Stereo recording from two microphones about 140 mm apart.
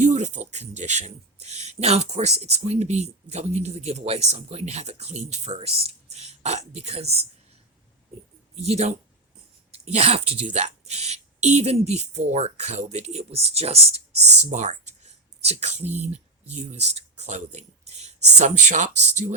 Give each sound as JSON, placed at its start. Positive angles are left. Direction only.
{"t": 0.0, "sound": "speech", "side_deg": -60}
{"t": 8.6, "sound": "speech", "side_deg": -50}
{"t": 14.4, "sound": "a sound", "side_deg": -55}
{"t": 16.0, "sound": "speech", "side_deg": -50}